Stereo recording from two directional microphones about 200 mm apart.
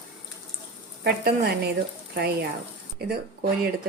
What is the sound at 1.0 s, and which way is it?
A woman's voice, 55° right (ahead or behind).